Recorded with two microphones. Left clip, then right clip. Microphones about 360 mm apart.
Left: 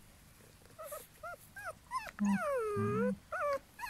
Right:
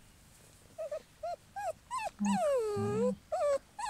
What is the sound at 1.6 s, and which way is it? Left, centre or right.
Dog, centre.